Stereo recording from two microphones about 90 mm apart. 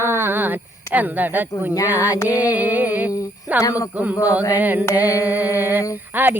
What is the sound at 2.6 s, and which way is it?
Speech, 20° right (ahead or behind).